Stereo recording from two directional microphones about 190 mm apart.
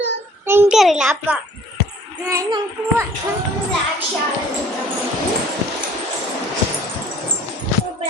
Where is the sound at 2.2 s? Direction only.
15° right (ahead or behind).